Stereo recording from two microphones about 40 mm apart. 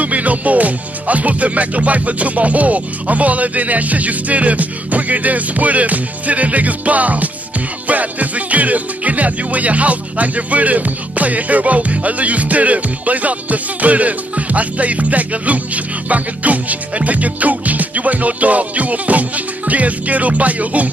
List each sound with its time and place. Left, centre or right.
0.0 s speech: right